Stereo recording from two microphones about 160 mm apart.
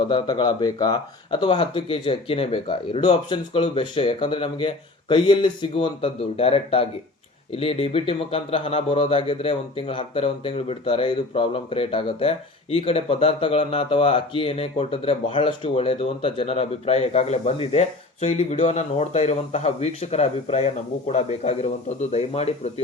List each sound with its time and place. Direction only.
0.1 s speech: 25° left (ahead or behind)